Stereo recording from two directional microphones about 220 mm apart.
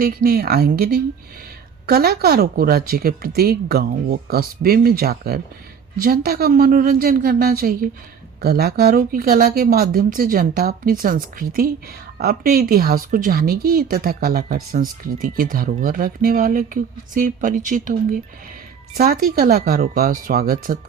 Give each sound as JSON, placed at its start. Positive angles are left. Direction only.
{"t": 0.0, "sound": "speech", "side_deg": -45}